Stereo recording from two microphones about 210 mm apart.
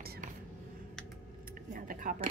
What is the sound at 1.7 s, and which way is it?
Speech, 40° right (ahead or behind).